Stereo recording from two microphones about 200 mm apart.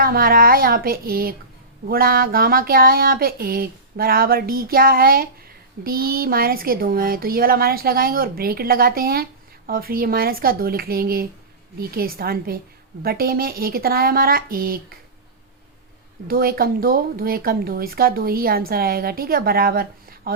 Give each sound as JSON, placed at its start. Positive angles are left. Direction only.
{"t": 0.0, "sound": "speech", "side_deg": -50}
{"t": 16.2, "sound": "speech", "side_deg": -50}